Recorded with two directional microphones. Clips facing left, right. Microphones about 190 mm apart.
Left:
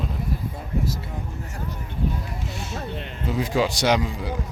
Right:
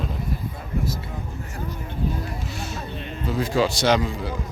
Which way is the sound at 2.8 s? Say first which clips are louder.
Left 1 dB; 65° left (ahead or behind).